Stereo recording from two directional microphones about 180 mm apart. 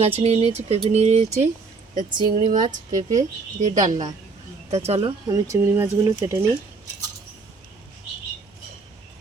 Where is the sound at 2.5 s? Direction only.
45° right (ahead or behind).